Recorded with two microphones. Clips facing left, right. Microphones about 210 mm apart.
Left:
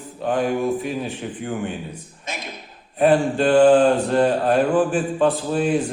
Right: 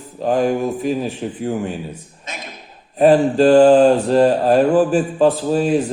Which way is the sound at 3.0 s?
40° right (ahead or behind).